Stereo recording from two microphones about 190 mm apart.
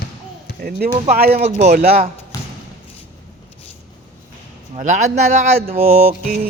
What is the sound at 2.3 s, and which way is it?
Thump, 20° left (ahead or behind).